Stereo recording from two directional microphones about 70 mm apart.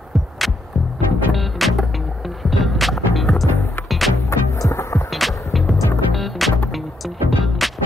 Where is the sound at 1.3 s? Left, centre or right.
Centre.